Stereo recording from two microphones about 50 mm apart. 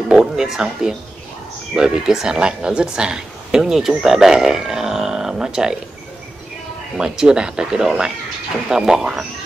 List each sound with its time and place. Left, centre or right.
0.1 s speech: centre
7.0 s speech: centre